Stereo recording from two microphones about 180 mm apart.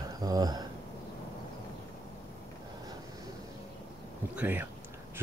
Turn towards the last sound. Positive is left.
turn(degrees=-10)  # may be behind; listen again after turning